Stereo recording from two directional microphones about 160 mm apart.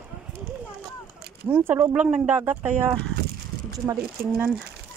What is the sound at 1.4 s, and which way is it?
Speech, 10° right (ahead or behind).